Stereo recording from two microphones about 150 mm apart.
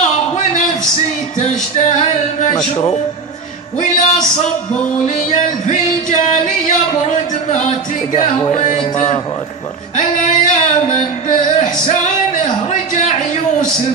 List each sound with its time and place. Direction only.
1.4 s male singing: 50° left (ahead or behind)
3.8 s a sound: 50° left (ahead or behind)
11.9 s a man's voice: 55° left (ahead or behind)